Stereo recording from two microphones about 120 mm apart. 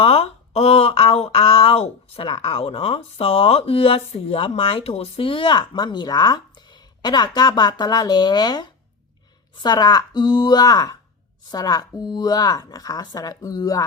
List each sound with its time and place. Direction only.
0.0 s speech: 55° left (ahead or behind); by 13.8 s 30° left (ahead or behind)